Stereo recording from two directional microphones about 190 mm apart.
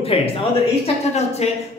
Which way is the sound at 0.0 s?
30° left (ahead or behind).